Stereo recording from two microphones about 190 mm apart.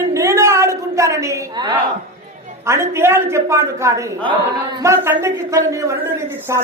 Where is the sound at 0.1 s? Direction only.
15° right (ahead or behind).